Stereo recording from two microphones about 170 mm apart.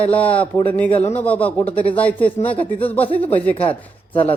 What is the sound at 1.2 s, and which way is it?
Speech, 10° left (ahead or behind).